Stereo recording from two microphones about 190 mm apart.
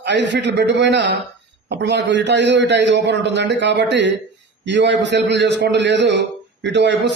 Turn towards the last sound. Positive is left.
turn(degrees=-65)  # may be behind; listen again after turning